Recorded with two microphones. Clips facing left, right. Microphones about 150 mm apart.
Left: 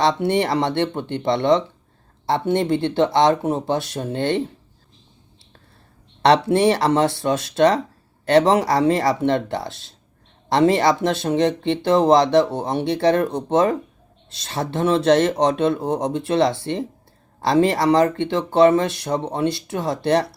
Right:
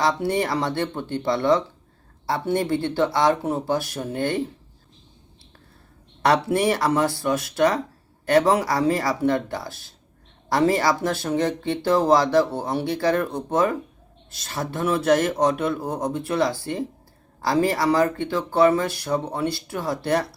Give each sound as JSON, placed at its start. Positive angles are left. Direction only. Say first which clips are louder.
{"t": 0.0, "sound": "speech", "louder": "left 3 dB", "side_deg": 25}
{"t": 6.2, "sound": "speech", "louder": "left 4 dB", "side_deg": 25}